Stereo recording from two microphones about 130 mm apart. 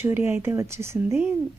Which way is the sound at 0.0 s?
15° right (ahead or behind).